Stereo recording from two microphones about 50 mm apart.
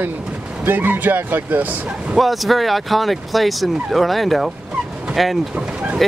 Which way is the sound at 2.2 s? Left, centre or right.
Centre.